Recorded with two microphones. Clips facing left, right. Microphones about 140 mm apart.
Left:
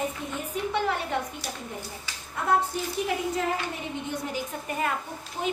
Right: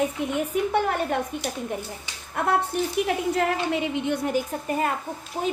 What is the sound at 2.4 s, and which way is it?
A woman's voice, 60° right (ahead or behind).